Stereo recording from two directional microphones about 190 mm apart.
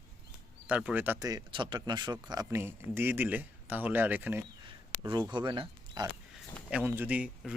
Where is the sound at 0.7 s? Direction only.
5° right (ahead or behind).